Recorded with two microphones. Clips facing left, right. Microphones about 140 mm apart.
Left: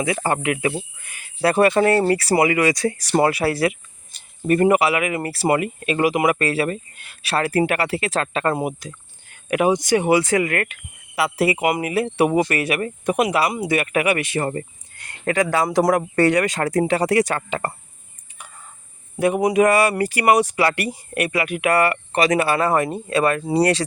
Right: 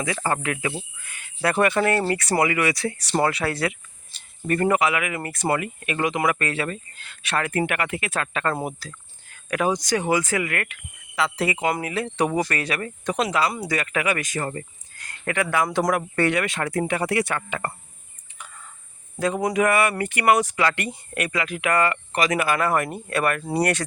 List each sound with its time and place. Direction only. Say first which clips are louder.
0.0 s speech: left 4 dB; 25° left (ahead or behind)
8.3 s speech: left 4 dB; 25° left (ahead or behind)
10.2 s speech: left 6 dB; 30° left (ahead or behind)
19.2 s speech: left 5 dB; 20° left (ahead or behind)
19.6 s speech: left 4 dB; 35° left (ahead or behind)